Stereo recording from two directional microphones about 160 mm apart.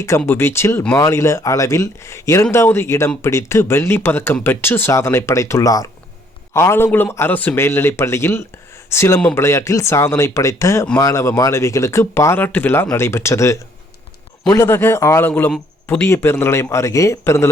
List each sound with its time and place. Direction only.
0.3 s speech: 15° left (ahead or behind)
16.0 s speech: 15° left (ahead or behind)